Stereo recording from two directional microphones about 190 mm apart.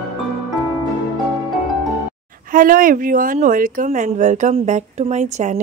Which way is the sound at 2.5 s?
45° right (ahead or behind).